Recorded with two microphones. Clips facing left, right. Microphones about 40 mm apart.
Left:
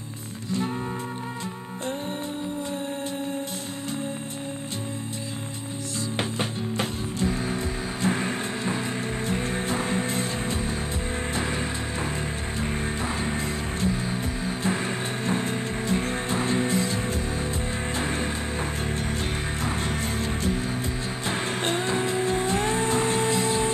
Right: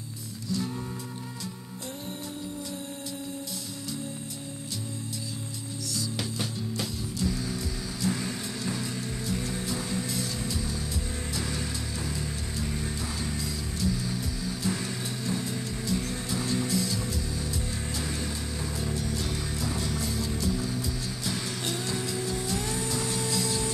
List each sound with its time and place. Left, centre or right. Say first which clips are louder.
5.9 s music: left 5 dB; left
13.2 s music: left 5 dB; left
21.3 s vehicle: left 7 dB; left